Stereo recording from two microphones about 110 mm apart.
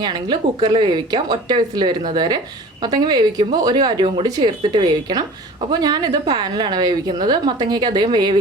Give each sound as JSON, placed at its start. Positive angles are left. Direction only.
{"t": 0.0, "sound": "a woman's voice", "side_deg": -40}